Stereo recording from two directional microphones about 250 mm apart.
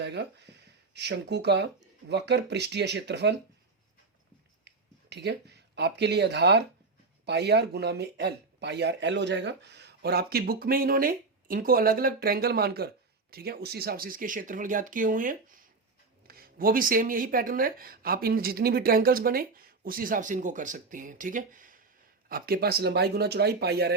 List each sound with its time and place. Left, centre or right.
0.0 s speech: right
4.6 s speech: right